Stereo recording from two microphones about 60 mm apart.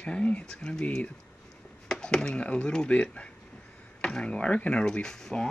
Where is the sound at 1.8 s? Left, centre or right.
Centre.